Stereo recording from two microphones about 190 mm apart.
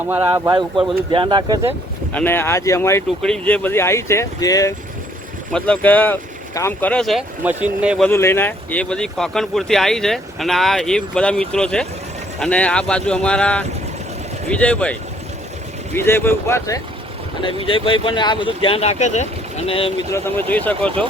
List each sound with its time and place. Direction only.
0.1 s speech: 15° right (ahead or behind)
0.5 s speech: 25° right (ahead or behind)
2.1 s speech: 10° left (ahead or behind)
3.2 s speech: 5° left (ahead or behind)
5.5 s speech: 5° left (ahead or behind)
8.0 s speech: 10° left (ahead or behind)
16.0 s speech: 10° left (ahead or behind)
17.7 s speech: 25° left (ahead or behind)
20.1 s speech: 15° left (ahead or behind)